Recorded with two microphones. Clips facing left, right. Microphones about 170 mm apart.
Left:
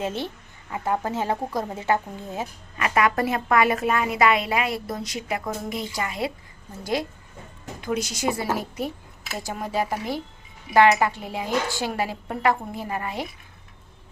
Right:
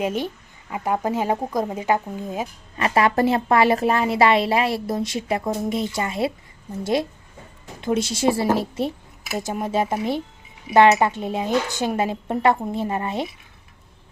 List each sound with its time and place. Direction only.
0.0 s speech: 15° right (ahead or behind)
2.7 s a woman's voice: 30° right (ahead or behind)
7.8 s a woman's voice: 25° right (ahead or behind)